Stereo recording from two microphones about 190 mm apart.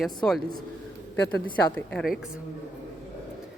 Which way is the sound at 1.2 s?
10° left (ahead or behind).